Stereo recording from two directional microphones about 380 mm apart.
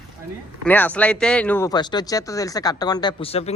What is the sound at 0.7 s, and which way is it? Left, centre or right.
Speech, centre.